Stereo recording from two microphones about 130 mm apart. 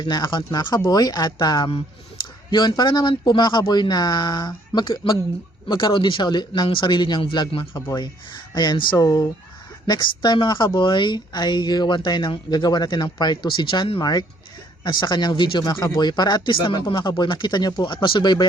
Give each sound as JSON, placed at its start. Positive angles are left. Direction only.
{"t": 0.0, "sound": "speech", "side_deg": 35}